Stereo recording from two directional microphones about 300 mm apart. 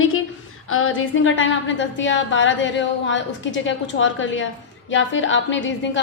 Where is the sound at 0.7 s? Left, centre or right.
Left.